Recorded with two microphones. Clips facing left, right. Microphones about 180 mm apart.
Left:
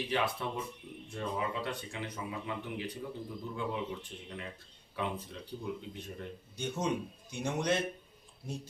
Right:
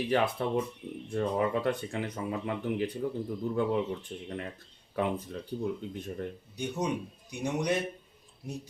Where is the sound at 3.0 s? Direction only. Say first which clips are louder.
Right 8 dB; 50° right (ahead or behind).